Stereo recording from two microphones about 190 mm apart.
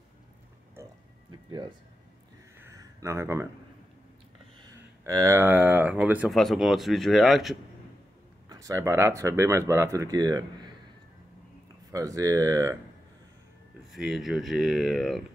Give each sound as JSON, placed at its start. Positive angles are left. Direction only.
{"t": 0.8, "sound": "music", "side_deg": -15}
{"t": 2.6, "sound": "a sound", "side_deg": -15}
{"t": 4.6, "sound": "speech", "side_deg": -20}
{"t": 8.5, "sound": "speech", "side_deg": -15}
{"t": 11.9, "sound": "speech", "side_deg": -15}
{"t": 13.9, "sound": "speech", "side_deg": 0}